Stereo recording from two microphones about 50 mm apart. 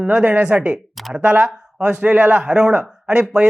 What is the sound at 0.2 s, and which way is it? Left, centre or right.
A man's voice, right.